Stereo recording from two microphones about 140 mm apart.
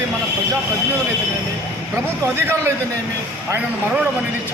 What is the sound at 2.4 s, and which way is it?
Speech, 15° right (ahead or behind).